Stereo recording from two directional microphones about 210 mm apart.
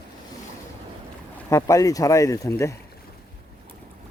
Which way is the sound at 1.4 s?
15° left (ahead or behind).